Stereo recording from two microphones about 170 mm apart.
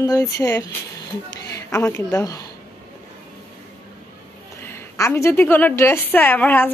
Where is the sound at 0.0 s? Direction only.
20° left (ahead or behind).